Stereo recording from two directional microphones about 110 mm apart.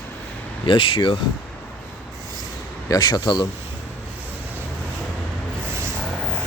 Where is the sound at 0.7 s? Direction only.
50° left (ahead or behind).